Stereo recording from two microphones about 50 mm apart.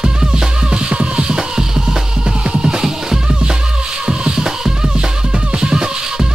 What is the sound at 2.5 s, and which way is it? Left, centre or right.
Music, centre.